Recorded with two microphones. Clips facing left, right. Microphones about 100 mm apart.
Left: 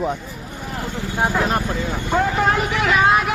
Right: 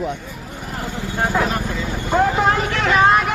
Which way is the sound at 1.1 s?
10° left (ahead or behind).